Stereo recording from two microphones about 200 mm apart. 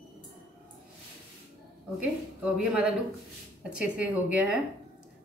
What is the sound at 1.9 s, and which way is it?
Speech, 5° right (ahead or behind).